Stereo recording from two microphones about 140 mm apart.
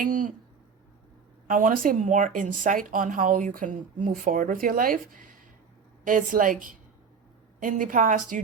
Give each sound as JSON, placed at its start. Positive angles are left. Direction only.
{"t": 0.0, "sound": "a woman's voice", "side_deg": -70}
{"t": 1.5, "sound": "a woman's voice", "side_deg": -75}
{"t": 6.1, "sound": "a woman's voice", "side_deg": -70}